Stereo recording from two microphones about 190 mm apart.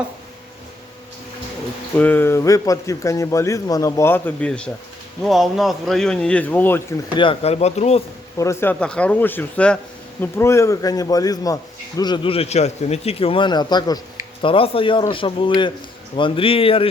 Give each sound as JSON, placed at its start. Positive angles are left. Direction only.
{"t": 2.0, "sound": "speech", "side_deg": 10}
{"t": 7.2, "sound": "speech", "side_deg": 30}
{"t": 8.4, "sound": "a man's voice", "side_deg": 15}